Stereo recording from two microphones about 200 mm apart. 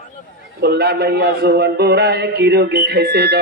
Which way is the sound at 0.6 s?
55° right (ahead or behind).